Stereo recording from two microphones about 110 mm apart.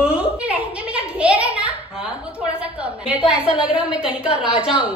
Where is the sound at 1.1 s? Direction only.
10° right (ahead or behind).